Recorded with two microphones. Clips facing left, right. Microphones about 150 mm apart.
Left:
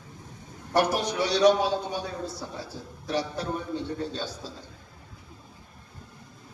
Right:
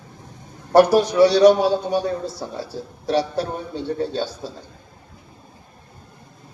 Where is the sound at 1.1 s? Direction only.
75° right (ahead or behind).